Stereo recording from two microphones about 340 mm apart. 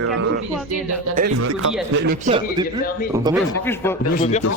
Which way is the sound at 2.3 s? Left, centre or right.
Centre.